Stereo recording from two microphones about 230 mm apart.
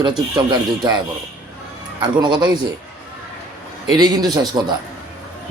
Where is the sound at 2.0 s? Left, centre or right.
Centre.